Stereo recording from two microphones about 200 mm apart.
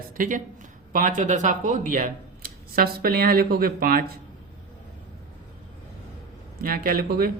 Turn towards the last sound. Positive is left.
turn(degrees=-45)  # may be behind; listen again after turning